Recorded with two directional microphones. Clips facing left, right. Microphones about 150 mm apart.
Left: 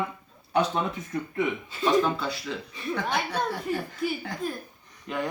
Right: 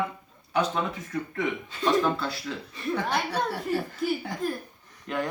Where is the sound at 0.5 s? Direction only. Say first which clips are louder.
Left 1 dB; 20° left (ahead or behind).